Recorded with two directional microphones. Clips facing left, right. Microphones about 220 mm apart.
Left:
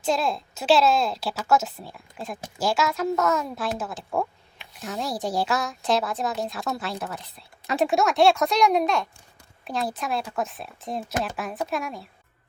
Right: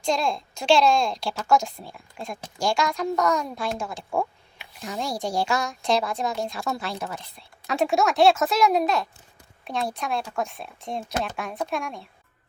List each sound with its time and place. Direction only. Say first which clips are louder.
0.0 s a woman's voice: even; 5° left (ahead or behind)